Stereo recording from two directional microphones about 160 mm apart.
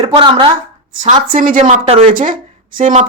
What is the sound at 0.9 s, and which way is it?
A woman's voice, 55° right (ahead or behind).